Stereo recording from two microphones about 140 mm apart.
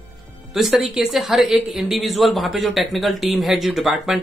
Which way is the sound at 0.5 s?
Centre (ahead or behind).